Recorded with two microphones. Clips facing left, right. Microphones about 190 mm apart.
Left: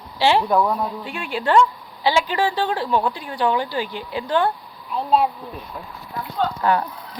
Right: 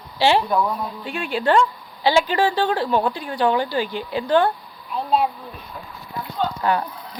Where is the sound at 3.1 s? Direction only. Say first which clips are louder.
Right 1 dB; 15° left (ahead or behind).